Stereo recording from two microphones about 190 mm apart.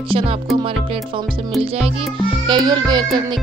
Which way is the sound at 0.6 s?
30° right (ahead or behind).